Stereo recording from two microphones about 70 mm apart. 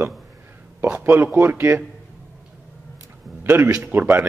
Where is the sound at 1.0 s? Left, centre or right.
Right.